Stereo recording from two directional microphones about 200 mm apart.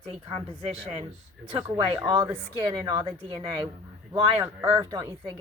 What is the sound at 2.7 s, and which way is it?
Speech, 25° right (ahead or behind).